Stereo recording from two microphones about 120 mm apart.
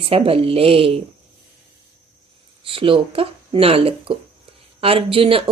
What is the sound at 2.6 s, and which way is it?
Speech, 50° right (ahead or behind).